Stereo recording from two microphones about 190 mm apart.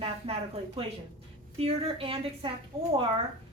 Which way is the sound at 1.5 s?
30° right (ahead or behind).